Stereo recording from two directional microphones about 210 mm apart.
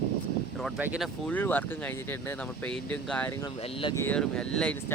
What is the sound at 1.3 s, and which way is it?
Speech, 10° left (ahead or behind).